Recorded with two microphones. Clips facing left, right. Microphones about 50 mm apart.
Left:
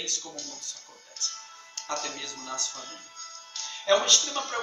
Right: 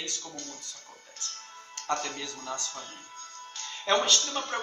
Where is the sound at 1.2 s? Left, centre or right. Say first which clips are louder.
Left 3 dB; centre.